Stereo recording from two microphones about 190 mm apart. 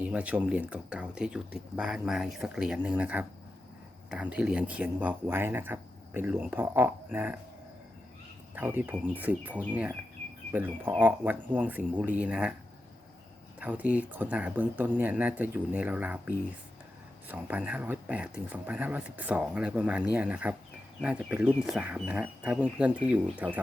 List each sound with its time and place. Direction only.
0.0 s speech: 5° right (ahead or behind)
8.5 s speech: 10° right (ahead or behind)
13.6 s speech: 10° right (ahead or behind)